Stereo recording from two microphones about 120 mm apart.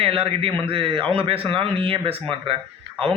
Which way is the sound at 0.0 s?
50° right (ahead or behind).